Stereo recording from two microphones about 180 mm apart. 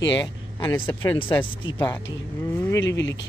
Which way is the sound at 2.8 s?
85° left.